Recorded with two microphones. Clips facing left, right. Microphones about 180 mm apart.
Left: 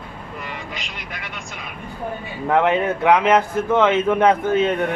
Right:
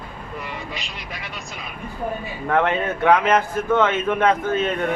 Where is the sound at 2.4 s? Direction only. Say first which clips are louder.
Left 3 dB; 15° left (ahead or behind).